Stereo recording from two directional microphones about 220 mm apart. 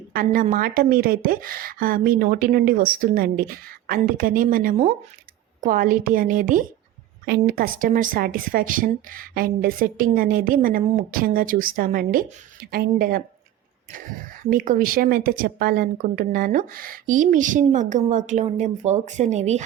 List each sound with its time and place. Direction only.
0.1 s a woman's voice: 40° right (ahead or behind)